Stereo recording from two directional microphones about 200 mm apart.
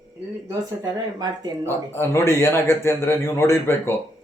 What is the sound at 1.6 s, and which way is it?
A man's voice, 10° left (ahead or behind).